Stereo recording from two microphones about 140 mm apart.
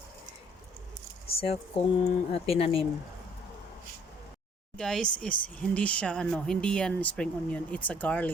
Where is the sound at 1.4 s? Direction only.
45° left (ahead or behind).